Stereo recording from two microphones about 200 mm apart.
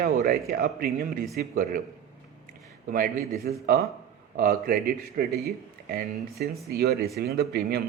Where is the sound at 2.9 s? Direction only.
45° right (ahead or behind).